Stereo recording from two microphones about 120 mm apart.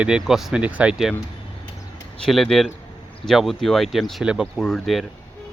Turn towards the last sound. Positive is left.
turn(degrees=0)  # may be behind; listen again after turning